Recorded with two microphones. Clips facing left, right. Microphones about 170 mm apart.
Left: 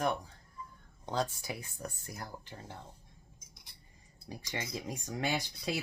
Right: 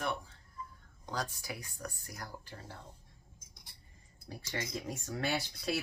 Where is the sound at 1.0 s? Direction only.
25° left (ahead or behind).